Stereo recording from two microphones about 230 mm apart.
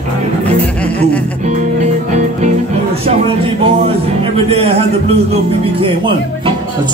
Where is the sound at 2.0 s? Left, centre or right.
Right.